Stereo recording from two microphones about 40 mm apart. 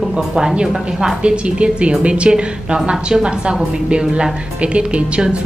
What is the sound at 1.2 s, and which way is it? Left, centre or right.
A woman's voice, right.